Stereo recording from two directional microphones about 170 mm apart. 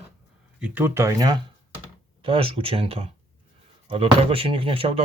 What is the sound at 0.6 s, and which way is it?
Speech, 10° right (ahead or behind).